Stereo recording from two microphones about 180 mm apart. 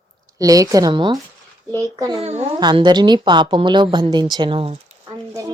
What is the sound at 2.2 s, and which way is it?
A woman's voice, 35° right (ahead or behind).